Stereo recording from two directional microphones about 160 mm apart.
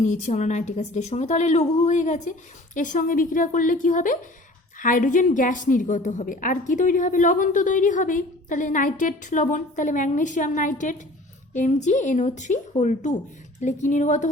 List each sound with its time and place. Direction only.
0.0 s a woman's voice: 50° left (ahead or behind)